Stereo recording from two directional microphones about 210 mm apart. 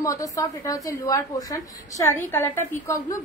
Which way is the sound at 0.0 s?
15° left (ahead or behind).